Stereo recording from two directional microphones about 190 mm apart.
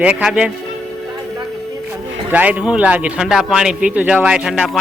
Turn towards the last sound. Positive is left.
turn(degrees=-5)  # may be behind; listen again after turning